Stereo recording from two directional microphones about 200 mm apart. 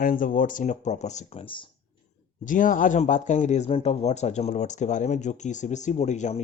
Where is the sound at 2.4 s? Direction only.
40° left (ahead or behind).